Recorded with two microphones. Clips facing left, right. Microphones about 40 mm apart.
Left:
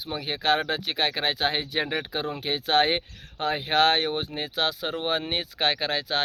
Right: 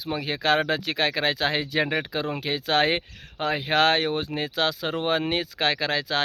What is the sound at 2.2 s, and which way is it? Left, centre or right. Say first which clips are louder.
Speech: right 2 dB; right.